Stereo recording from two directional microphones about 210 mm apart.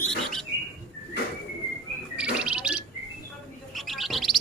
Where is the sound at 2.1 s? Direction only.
5° right (ahead or behind).